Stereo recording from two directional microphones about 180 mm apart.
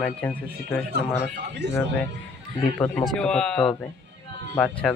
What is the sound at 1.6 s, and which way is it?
Speech, 70° right (ahead or behind).